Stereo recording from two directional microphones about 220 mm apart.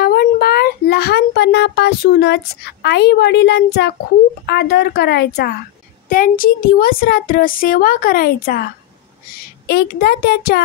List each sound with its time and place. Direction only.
0.0 s a child's voice: 45° left (ahead or behind)